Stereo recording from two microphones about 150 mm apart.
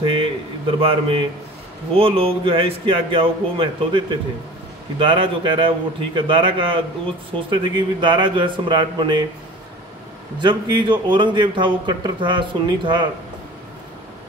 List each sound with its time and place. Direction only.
0.0 s a sound: 35° right (ahead or behind)
2.0 s a man's voice: 40° right (ahead or behind)
10.4 s a man's voice: 30° right (ahead or behind)